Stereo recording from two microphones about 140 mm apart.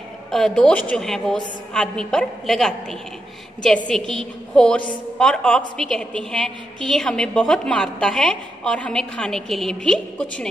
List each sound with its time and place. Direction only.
0.3 s a woman's voice: 5° left (ahead or behind)